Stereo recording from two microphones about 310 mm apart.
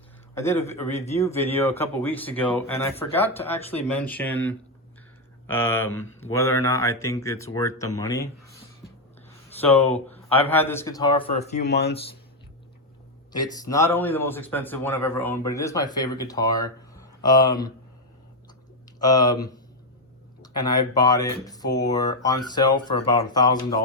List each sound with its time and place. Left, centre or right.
0.3 s a man's voice: centre
9.6 s a man's voice: centre; by 11.6 s left
11.6 s speech: left
13.3 s a man's voice: centre
18.9 s a man's voice: centre